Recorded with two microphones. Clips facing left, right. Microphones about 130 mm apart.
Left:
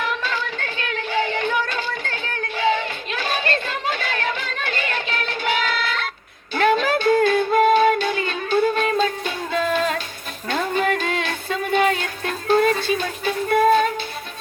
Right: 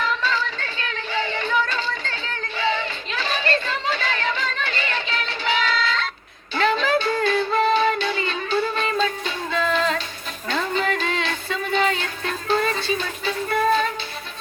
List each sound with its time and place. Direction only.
0.0 s music: 55° left (ahead or behind)